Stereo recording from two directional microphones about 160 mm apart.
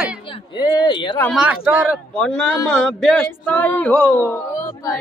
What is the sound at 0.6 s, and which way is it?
Child singing, 25° left (ahead or behind).